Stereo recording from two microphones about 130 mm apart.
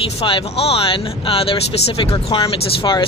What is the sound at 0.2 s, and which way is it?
Speech, 45° left (ahead or behind).